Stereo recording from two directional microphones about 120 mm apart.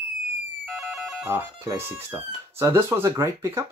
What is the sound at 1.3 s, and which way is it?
Speech, 20° right (ahead or behind).